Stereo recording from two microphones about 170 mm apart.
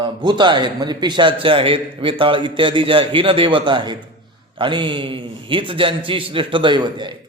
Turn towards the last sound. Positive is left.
turn(degrees=-25)  # may be behind; listen again after turning